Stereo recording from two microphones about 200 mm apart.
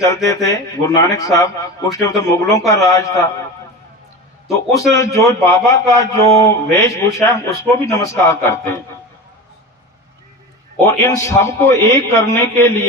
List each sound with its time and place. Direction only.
0.5 s a man's voice: 15° left (ahead or behind)
4.4 s a man's voice: centre (ahead or behind)
4.9 s a man's voice: 15° left (ahead or behind)
11.0 s a man's voice: 15° left (ahead or behind)